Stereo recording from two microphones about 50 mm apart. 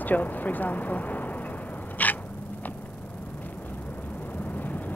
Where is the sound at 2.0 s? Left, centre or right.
Left.